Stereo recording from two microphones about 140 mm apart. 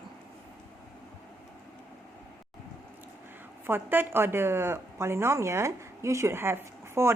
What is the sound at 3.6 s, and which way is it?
Speech, 15° right (ahead or behind).